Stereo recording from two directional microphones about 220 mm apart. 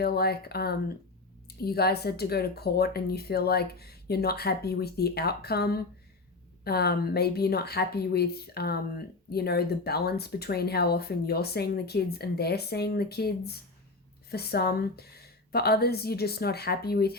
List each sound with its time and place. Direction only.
0.0 s a woman's voice: 45° left (ahead or behind)